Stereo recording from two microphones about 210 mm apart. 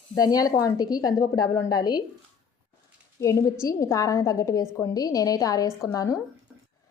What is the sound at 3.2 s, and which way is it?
Speech, 15° left (ahead or behind).